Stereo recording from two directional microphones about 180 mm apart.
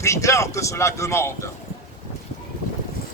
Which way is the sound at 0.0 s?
15° left (ahead or behind).